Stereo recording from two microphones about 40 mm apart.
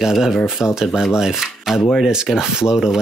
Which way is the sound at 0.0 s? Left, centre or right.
Centre.